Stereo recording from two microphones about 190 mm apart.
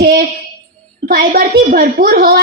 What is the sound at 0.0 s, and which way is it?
Speech, 50° right (ahead or behind).